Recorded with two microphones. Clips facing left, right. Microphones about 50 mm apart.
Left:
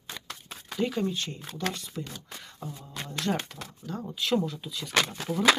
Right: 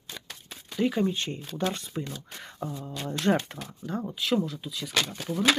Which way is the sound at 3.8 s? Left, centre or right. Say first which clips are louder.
Right 4 dB; centre.